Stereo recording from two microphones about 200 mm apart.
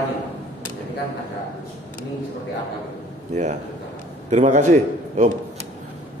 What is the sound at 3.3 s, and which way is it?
A man's voice, 35° right (ahead or behind).